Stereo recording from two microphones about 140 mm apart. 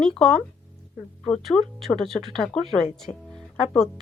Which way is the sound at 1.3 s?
Centre (ahead or behind).